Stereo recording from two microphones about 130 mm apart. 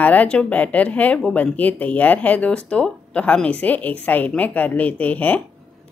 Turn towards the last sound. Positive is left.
turn(degrees=10)  # may be behind; listen again after turning